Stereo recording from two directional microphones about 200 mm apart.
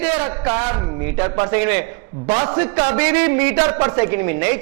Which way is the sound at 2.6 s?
10° right (ahead or behind).